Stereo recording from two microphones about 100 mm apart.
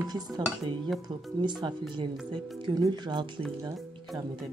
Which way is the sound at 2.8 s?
50° right (ahead or behind).